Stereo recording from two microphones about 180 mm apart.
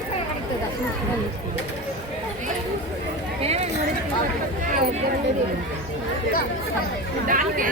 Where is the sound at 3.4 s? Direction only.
35° right (ahead or behind).